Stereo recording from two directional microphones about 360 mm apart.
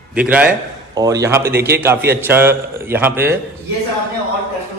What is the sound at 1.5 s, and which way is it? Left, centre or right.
Speech, right.